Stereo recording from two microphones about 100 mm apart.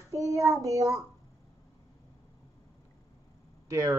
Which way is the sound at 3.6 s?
35° right (ahead or behind).